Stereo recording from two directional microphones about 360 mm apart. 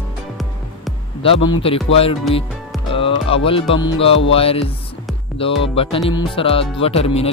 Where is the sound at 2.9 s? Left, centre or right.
Centre.